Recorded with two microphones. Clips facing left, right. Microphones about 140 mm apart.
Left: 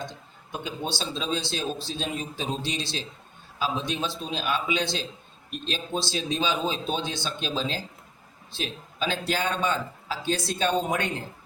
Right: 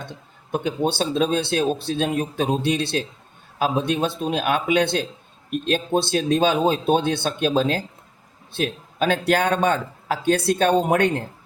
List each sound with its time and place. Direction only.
0.0 s speech: 60° right (ahead or behind)